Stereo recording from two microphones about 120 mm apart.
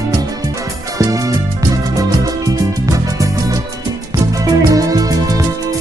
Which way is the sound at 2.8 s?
30° right (ahead or behind).